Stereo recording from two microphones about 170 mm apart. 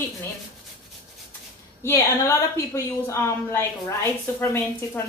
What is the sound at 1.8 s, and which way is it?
A woman's voice, 15° left (ahead or behind).